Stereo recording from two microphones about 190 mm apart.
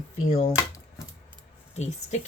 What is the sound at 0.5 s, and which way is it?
Typewriter, 15° left (ahead or behind).